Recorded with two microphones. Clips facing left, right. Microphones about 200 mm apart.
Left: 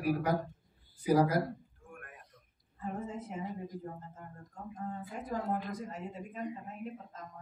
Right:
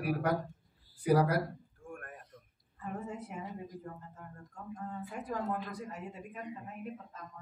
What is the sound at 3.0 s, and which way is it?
Speech, 65° right (ahead or behind).